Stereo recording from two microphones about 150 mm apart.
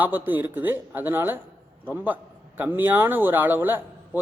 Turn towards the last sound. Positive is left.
turn(degrees=-15)  # may be behind; listen again after turning